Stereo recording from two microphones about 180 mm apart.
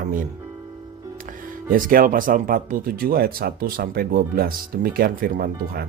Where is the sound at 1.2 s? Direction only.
50° right (ahead or behind).